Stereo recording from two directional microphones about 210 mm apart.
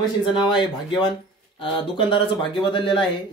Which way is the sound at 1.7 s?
25° left (ahead or behind).